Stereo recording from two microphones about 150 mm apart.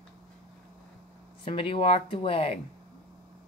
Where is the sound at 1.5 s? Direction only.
35° left (ahead or behind).